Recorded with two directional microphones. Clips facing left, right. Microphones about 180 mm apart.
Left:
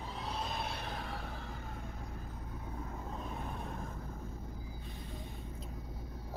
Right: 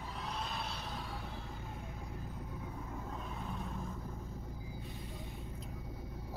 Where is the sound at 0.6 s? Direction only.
55° left (ahead or behind).